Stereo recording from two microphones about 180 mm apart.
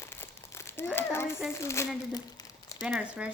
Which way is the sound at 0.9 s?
15° left (ahead or behind).